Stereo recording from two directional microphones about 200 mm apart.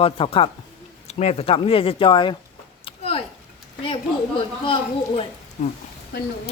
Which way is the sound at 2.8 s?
30° left (ahead or behind).